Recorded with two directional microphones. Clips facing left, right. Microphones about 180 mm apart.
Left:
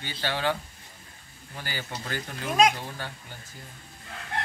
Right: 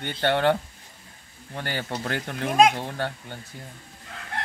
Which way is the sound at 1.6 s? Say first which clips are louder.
Right 6 dB; 60° right (ahead or behind).